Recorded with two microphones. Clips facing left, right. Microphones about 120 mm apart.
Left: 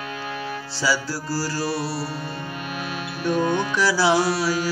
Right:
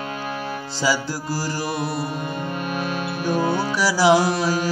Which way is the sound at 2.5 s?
50° right (ahead or behind).